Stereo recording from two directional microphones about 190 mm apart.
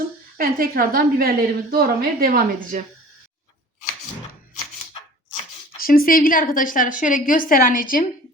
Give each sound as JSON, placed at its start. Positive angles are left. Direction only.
{"t": 0.3, "sound": "a woman's voice", "side_deg": -50}
{"t": 5.8, "sound": "a woman's voice", "side_deg": 50}